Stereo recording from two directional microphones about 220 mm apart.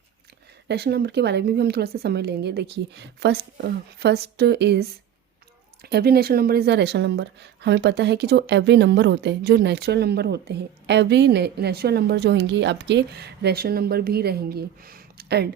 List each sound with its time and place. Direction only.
0.7 s speech: 45° right (ahead or behind)